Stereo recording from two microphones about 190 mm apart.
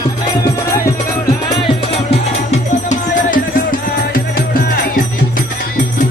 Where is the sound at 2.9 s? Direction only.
45° left (ahead or behind).